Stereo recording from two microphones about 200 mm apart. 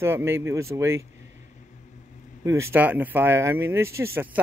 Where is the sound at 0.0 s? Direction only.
10° right (ahead or behind).